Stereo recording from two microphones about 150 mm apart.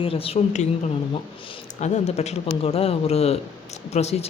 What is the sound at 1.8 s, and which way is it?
Speech, 50° left (ahead or behind).